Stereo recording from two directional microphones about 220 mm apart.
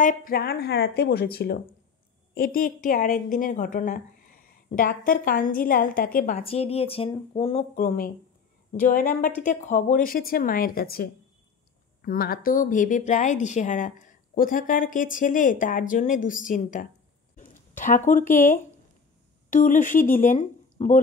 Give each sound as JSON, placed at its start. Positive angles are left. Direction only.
{"t": 0.0, "sound": "a woman's voice", "side_deg": 40}
{"t": 6.3, "sound": "speech", "side_deg": 25}
{"t": 7.7, "sound": "a woman's voice", "side_deg": 40}
{"t": 19.5, "sound": "a woman's voice", "side_deg": 35}